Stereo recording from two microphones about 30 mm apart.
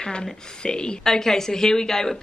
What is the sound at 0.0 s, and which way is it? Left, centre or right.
Speech, left.